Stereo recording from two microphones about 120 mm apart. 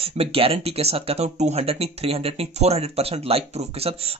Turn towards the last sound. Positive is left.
turn(degrees=-55)  # may be behind; listen again after turning